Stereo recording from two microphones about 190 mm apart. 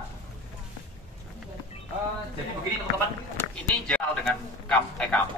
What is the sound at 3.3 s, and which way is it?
A man's voice, 5° left (ahead or behind).